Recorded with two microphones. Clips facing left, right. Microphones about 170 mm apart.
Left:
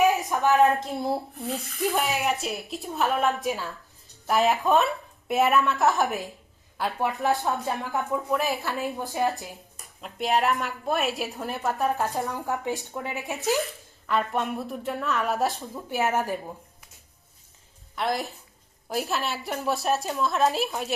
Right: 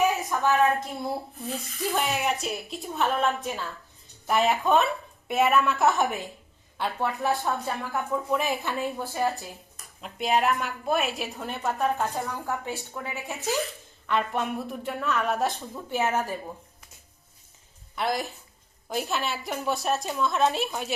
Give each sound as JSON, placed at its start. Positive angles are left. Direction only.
{"t": 0.0, "sound": "a sound", "side_deg": 20}
{"t": 1.5, "sound": "speech", "side_deg": 0}
{"t": 7.4, "sound": "a woman's voice", "side_deg": 20}
{"t": 8.3, "sound": "speech", "side_deg": 0}
{"t": 8.8, "sound": "a woman's voice", "side_deg": 15}
{"t": 9.8, "sound": "speech", "side_deg": 0}
{"t": 12.1, "sound": "a woman's voice", "side_deg": 15}
{"t": 14.1, "sound": "speech", "side_deg": 0}
{"t": 15.9, "sound": "a woman's voice", "side_deg": 15}
{"t": 17.9, "sound": "speech", "side_deg": 0}